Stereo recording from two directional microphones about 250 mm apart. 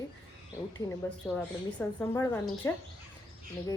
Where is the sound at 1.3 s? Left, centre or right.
Centre.